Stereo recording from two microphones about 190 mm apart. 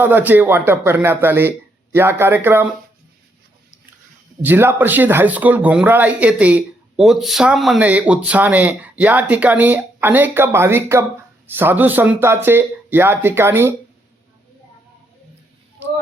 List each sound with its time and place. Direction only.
0.0 s speech: 10° right (ahead or behind)
4.4 s speech: 10° right (ahead or behind)